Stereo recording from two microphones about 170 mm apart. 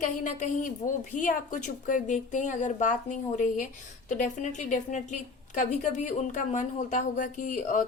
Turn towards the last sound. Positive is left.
turn(degrees=50)  # may be behind; listen again after turning